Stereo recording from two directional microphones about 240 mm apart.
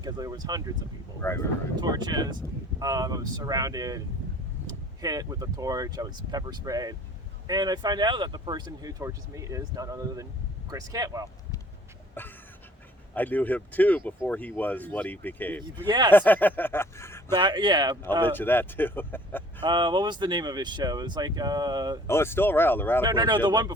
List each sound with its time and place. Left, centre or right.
0.0 s speech: centre
1.2 s speech: centre
1.8 s speech: centre
13.1 s speech: centre
15.9 s speech: centre
16.1 s speech: centre
17.3 s speech: centre
18.3 s speech: centre
19.6 s speech: centre
22.0 s speech: centre
23.0 s speech: centre